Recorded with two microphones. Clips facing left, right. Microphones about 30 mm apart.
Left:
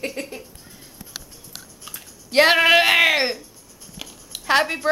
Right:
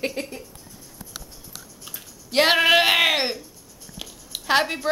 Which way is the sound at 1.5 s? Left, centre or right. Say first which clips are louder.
Left 2 dB; left.